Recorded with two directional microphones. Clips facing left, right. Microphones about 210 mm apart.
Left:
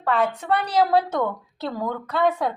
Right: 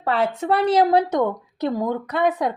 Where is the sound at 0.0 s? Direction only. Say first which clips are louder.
Right 1 dB; 25° right (ahead or behind).